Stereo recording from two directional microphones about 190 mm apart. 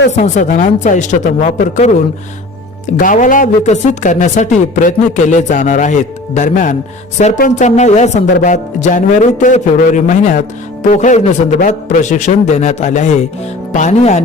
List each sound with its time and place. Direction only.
0.2 s a woman's voice: 40° left (ahead or behind)
3.0 s a woman's voice: 45° left (ahead or behind)